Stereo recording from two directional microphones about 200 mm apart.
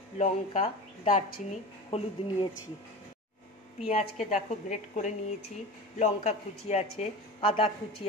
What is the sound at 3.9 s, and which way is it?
Speech, 30° left (ahead or behind).